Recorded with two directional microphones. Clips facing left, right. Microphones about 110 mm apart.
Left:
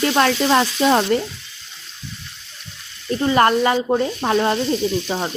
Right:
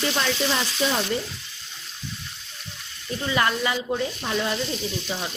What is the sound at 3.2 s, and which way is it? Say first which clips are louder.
Sizzle: left 9 dB; 45° left (ahead or behind).